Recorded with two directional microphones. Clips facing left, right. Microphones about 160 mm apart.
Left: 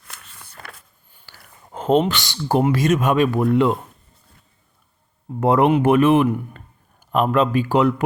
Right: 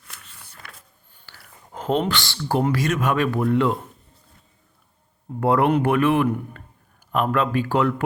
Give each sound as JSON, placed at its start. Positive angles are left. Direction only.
{"t": 0.6, "sound": "vehicle", "side_deg": 85}
{"t": 1.2, "sound": "a sound", "side_deg": 15}
{"t": 1.7, "sound": "speech", "side_deg": 25}
{"t": 5.4, "sound": "speech", "side_deg": 20}